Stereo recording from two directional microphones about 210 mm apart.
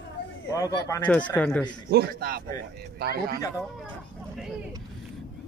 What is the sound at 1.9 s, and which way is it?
A man's voice, 45° right (ahead or behind).